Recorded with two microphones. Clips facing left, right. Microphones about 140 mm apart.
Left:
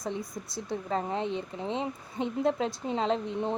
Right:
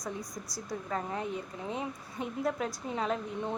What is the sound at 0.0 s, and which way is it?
Speech, 25° left (ahead or behind).